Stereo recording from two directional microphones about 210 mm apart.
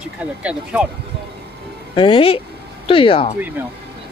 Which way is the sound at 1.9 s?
25° left (ahead or behind).